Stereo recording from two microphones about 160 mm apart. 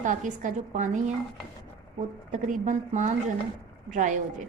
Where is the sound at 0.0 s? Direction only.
50° right (ahead or behind).